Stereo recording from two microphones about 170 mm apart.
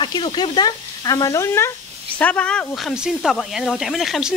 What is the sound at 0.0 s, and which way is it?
Speech, 30° left (ahead or behind).